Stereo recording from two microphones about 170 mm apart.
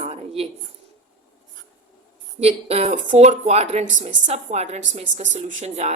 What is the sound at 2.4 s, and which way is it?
A woman's voice, 35° right (ahead or behind).